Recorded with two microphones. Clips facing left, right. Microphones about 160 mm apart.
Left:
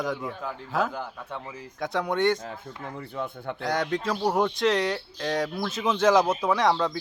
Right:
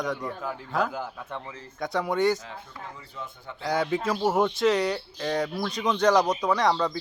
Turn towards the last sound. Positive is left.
turn(degrees=0)  # may be behind; listen again after turning